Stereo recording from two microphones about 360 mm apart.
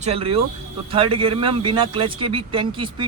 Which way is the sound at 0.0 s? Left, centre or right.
Centre.